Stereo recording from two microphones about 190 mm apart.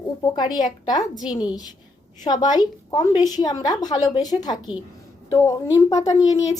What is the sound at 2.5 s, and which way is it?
A woman's voice, 20° left (ahead or behind).